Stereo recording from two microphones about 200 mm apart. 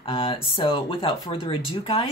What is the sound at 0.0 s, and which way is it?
Speech, 25° left (ahead or behind).